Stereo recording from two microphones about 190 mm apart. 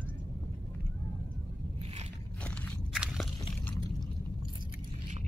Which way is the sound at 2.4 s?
5° left (ahead or behind).